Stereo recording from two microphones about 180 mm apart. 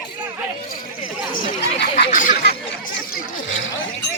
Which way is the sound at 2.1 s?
45° left (ahead or behind).